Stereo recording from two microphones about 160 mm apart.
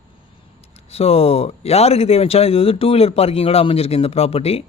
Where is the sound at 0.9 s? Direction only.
40° left (ahead or behind).